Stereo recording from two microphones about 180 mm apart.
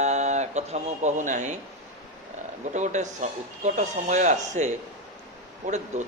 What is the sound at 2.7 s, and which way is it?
Speech, 40° right (ahead or behind).